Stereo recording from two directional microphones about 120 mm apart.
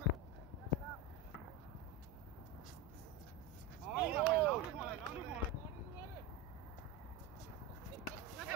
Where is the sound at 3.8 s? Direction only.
5° right (ahead or behind).